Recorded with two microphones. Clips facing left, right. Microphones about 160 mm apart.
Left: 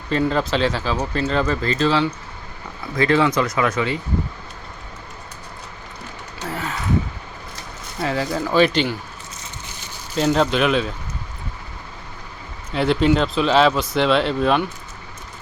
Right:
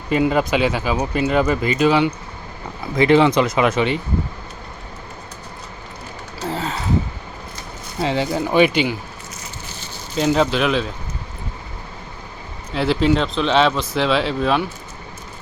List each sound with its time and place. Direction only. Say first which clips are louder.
0.1 s speech: right 3 dB; 10° right (ahead or behind)
6.5 s a sound: right 3 dB; 25° right (ahead or behind)
8.0 s speech: right 2 dB; 20° right (ahead or behind)
8.6 s speech: right 1 dB; 10° right (ahead or behind)
10.2 s speech: even; centre (ahead or behind)
12.7 s speech: even; centre (ahead or behind)